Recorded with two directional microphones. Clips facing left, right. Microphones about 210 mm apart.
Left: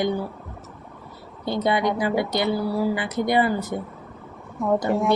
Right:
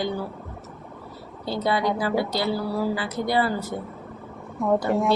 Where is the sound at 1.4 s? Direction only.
20° left (ahead or behind).